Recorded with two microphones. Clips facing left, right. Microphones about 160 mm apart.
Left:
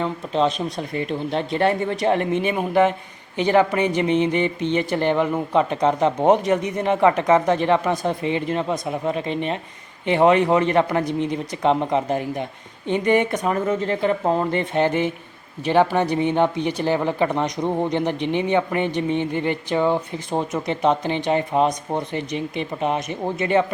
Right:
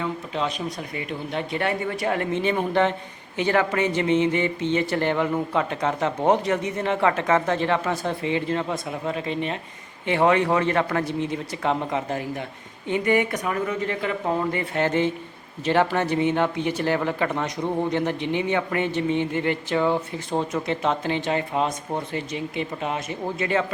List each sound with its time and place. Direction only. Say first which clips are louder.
0.0 s speech: left 6 dB; 25° left (ahead or behind)